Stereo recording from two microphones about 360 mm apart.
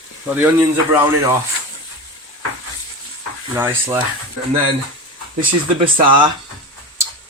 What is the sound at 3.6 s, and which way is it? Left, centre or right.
Speech, centre.